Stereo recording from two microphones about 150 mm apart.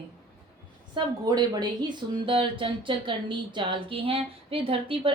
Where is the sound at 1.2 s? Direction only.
25° right (ahead or behind).